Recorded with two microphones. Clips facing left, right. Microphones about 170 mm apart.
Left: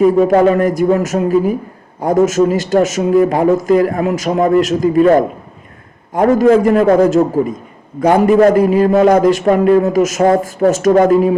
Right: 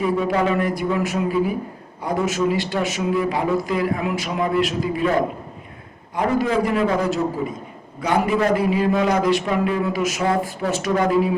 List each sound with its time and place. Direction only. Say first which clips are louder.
0.0 s a man's voice: left 11 dB; 45° left (ahead or behind)